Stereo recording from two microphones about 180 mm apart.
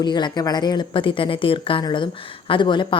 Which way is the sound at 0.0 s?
25° left (ahead or behind).